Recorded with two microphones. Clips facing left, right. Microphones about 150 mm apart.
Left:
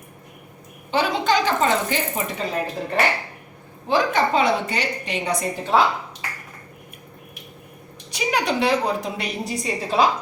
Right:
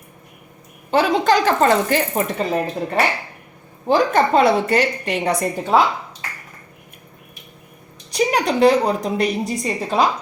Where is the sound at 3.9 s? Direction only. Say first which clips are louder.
Right 4 dB; 50° right (ahead or behind).